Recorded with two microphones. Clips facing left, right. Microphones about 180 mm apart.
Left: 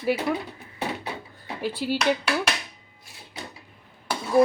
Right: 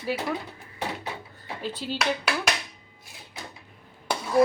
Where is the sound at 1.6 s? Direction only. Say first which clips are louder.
Left 5 dB; 10° left (ahead or behind).